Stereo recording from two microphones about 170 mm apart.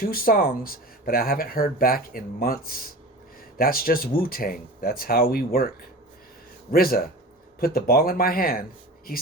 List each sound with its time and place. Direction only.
0.0 s speech: 60° left (ahead or behind)